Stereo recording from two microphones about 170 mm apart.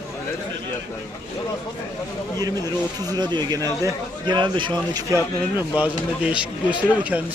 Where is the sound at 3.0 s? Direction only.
25° right (ahead or behind).